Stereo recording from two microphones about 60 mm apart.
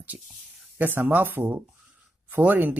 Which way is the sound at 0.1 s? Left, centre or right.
Right.